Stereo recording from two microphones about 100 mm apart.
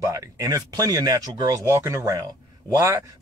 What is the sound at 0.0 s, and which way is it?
Speech, 30° right (ahead or behind).